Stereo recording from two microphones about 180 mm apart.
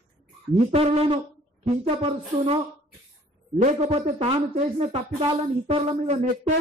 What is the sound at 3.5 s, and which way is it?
A man's voice, 35° right (ahead or behind).